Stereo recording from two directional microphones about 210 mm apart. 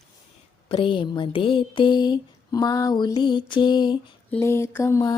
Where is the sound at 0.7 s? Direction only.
25° left (ahead or behind).